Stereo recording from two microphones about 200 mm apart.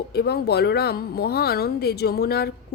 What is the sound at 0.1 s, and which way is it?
Speech, 50° left (ahead or behind).